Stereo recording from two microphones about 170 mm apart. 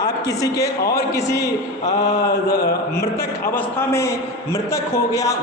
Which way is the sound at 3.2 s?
15° left (ahead or behind).